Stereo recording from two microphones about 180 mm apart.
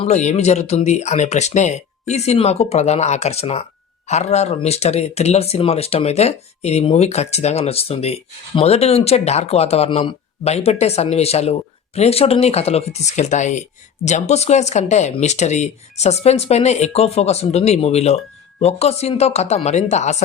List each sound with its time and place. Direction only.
0.0 s speech: 40° left (ahead or behind)